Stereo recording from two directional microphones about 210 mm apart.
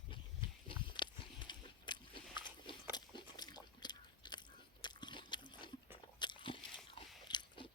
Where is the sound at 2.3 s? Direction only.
20° left (ahead or behind).